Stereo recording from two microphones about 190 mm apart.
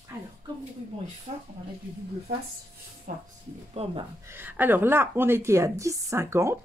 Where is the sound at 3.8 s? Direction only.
35° right (ahead or behind).